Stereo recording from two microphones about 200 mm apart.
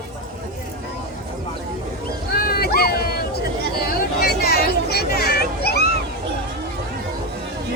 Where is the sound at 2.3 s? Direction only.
50° left (ahead or behind).